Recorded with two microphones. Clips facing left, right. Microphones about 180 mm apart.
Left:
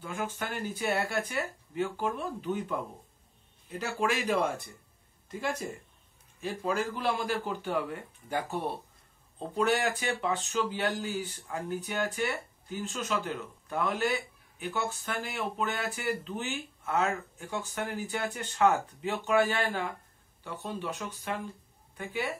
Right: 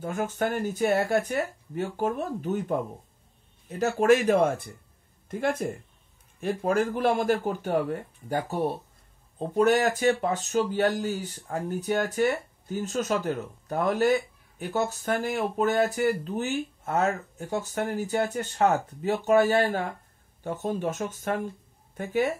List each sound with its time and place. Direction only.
0.0 s speech: 45° right (ahead or behind)
3.6 s speech: 45° right (ahead or behind)